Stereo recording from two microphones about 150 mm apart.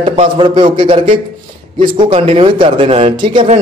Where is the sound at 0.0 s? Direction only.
35° right (ahead or behind).